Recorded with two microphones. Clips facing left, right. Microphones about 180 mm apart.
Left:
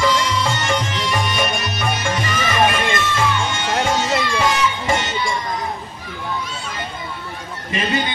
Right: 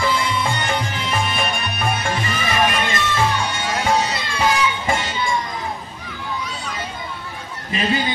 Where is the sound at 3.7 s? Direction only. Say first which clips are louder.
Left 1 dB; 85° left.